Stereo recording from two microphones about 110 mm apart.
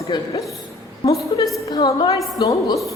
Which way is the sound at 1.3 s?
40° left (ahead or behind).